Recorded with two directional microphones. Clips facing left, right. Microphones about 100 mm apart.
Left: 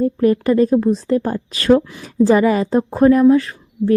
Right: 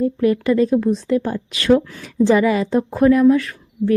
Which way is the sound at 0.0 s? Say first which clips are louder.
Left 2 dB; 40° left (ahead or behind).